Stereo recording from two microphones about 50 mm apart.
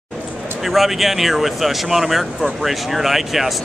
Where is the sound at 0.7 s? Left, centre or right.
Centre.